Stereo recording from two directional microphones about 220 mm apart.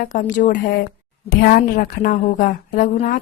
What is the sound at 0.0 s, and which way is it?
Speech, 35° left (ahead or behind).